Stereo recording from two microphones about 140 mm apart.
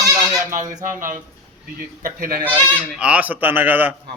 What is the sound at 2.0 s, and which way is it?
Speech, 85° right.